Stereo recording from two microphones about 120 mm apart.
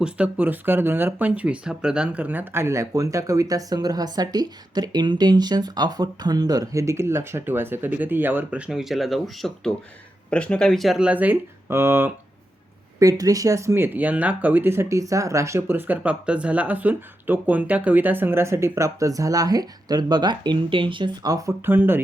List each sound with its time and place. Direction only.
0.0 s speech: 10° right (ahead or behind)
13.0 s speech: 30° right (ahead or behind)
21.3 s speech: 20° right (ahead or behind)